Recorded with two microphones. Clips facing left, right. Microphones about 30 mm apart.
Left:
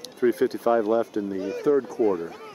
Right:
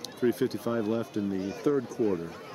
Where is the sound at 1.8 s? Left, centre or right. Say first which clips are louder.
Left 5 dB; left.